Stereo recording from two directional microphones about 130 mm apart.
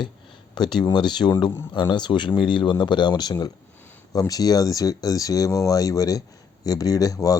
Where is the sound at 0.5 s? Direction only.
35° left (ahead or behind).